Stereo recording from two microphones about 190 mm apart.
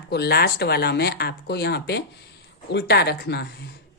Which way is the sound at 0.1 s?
55° left (ahead or behind).